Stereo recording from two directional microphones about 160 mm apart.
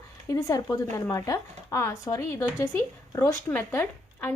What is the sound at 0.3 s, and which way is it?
A woman's voice, 20° left (ahead or behind).